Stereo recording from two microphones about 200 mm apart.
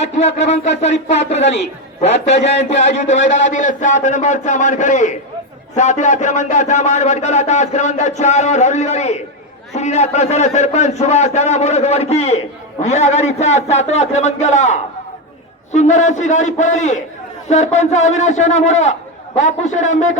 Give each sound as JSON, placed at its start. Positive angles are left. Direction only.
{"t": 0.0, "sound": "a man's voice", "side_deg": 35}